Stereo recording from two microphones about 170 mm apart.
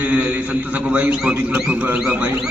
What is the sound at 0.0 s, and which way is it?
A man's voice, 10° right (ahead or behind).